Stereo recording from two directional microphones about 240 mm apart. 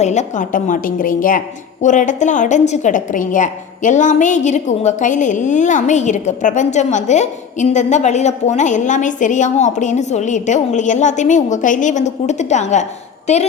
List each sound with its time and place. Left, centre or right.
0.0 s a woman's voice: left